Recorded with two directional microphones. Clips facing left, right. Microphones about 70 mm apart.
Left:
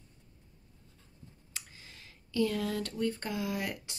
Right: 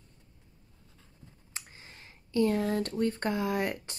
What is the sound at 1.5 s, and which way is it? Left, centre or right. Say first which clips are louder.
Clicking: right 2 dB; right.